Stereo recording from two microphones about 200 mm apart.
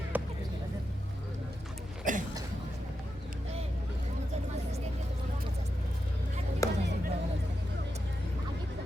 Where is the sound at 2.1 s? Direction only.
40° right (ahead or behind).